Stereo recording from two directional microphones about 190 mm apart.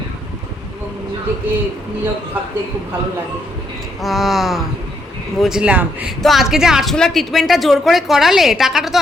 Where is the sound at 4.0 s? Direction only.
Centre (ahead or behind).